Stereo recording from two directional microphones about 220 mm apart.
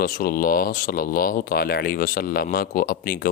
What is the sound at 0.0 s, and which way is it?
Speech, 40° left (ahead or behind).